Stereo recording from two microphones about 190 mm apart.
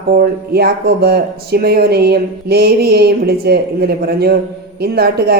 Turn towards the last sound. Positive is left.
turn(degrees=-55)  # may be behind; listen again after turning